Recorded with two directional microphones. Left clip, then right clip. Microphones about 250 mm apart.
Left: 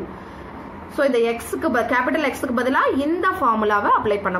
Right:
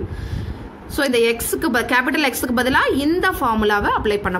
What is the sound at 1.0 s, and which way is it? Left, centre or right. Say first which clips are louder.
A woman's voice: right 1 dB; right.